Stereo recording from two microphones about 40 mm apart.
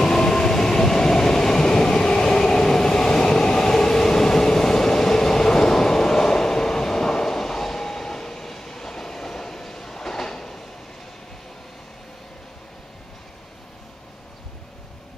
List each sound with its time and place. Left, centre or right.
0.0 s train: centre